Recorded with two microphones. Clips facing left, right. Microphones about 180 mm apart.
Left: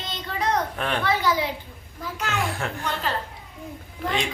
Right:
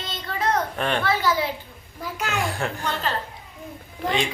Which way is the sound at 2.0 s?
10° right (ahead or behind).